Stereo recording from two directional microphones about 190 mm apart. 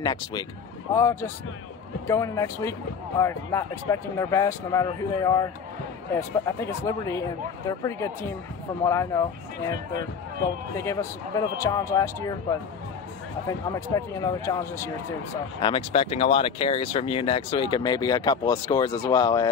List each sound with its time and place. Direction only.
0.0 s speech: 20° left (ahead or behind)
10.8 s speech: 15° left (ahead or behind)
15.6 s speech: 30° left (ahead or behind)